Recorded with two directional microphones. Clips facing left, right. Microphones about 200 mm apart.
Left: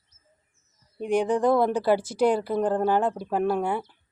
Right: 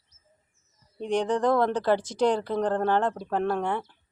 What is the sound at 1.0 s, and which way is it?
Speech, 10° left (ahead or behind).